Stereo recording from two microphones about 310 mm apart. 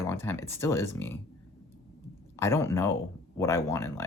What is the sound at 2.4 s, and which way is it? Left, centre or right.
Speech, centre.